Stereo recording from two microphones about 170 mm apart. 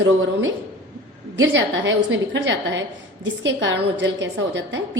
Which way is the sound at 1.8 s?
90° right.